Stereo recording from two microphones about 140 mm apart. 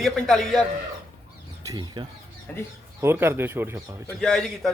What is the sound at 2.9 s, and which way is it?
Speech, 15° right (ahead or behind).